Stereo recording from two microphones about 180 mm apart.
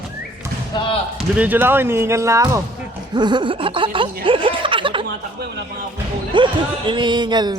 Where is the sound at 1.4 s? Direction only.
10° right (ahead or behind); by 4.1 s 30° right (ahead or behind).